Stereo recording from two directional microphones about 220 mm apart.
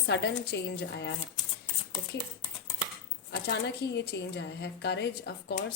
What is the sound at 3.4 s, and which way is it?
A woman's voice, 50° left (ahead or behind).